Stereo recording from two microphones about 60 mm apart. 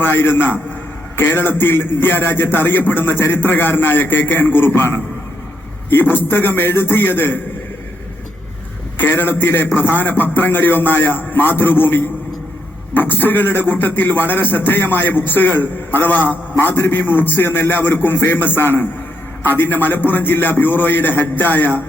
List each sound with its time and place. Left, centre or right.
0.0 s a man's voice: left
9.0 s a man's voice: left